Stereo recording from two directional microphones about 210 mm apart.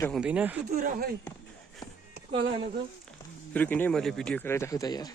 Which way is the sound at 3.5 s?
10° left (ahead or behind).